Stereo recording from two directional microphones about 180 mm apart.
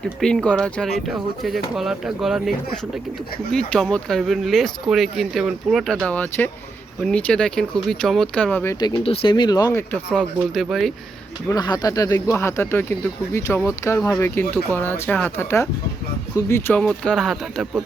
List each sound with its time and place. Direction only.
0.2 s speech: 5° left (ahead or behind)
3.5 s speech: 5° left (ahead or behind)
8.8 s speech: 30° left (ahead or behind)
10.1 s speech: centre (ahead or behind)
11.4 s speech: 20° left (ahead or behind); by 17.8 s centre (ahead or behind)